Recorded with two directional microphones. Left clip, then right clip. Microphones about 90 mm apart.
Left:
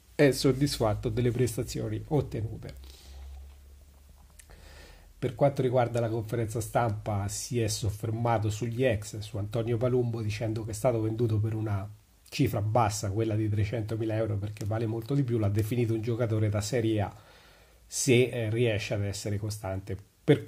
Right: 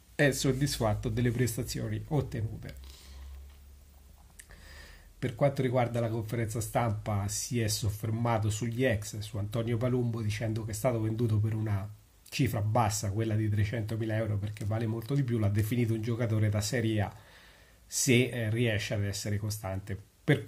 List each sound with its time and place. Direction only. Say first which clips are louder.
0.1 s a man's voice: left 4 dB; 40° left (ahead or behind)
4.6 s a man's voice: even; 30° left (ahead or behind)